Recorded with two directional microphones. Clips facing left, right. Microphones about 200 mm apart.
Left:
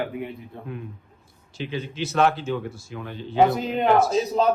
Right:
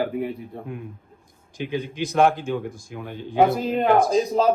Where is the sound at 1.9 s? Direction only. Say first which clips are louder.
Right 2 dB; 15° right (ahead or behind).